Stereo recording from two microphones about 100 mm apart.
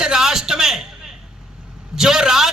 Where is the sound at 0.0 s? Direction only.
5° right (ahead or behind).